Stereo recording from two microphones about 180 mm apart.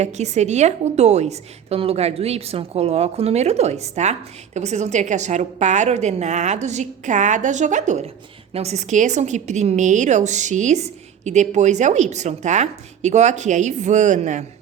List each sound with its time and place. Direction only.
0.0 s a woman's voice: 40° right (ahead or behind)